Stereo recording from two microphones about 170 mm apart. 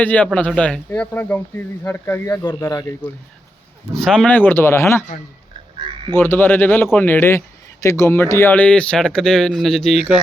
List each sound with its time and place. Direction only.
0.0 s a man's voice: 10° left (ahead or behind)
3.9 s a man's voice: 5° left (ahead or behind)
6.1 s a man's voice: 10° left (ahead or behind)